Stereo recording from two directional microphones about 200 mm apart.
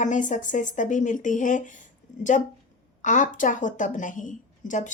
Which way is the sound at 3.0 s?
40° left (ahead or behind).